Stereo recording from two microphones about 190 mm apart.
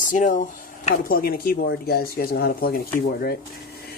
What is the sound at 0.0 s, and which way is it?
Speech, 45° left (ahead or behind).